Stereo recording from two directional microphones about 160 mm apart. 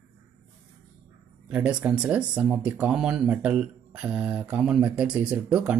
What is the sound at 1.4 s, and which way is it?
Speech, 5° right (ahead or behind).